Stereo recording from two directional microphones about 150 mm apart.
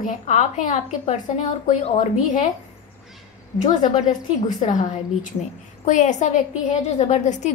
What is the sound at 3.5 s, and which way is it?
A woman's voice, 55° left (ahead or behind).